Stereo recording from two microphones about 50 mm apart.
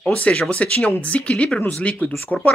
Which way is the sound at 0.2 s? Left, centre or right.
Left.